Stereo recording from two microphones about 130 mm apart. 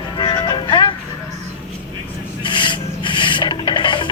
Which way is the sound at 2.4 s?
40° left (ahead or behind).